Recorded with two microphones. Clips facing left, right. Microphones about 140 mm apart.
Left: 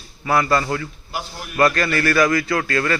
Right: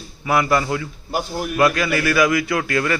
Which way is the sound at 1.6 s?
5° right (ahead or behind).